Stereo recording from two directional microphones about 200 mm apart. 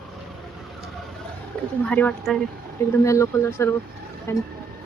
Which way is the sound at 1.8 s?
5° left (ahead or behind).